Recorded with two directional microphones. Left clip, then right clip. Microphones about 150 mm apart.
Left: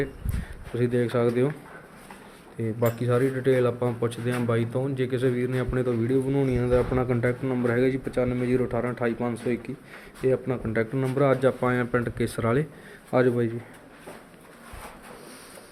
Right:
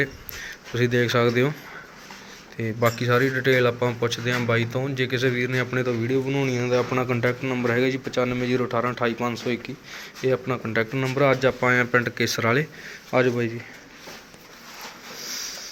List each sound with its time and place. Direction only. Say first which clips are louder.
0.8 s a man's voice: right 3 dB; 10° left (ahead or behind)
2.6 s a man's voice: right 3 dB; 10° left (ahead or behind)
13.1 s speech: right 1 dB; 20° left (ahead or behind)
15.2 s a sound: right 12 dB; 10° left (ahead or behind)